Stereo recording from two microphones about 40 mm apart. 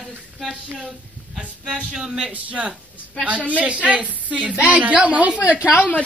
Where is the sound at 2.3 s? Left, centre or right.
Right.